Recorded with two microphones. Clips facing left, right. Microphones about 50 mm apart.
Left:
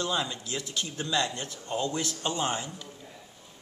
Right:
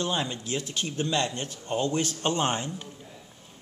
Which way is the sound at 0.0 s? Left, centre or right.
Right.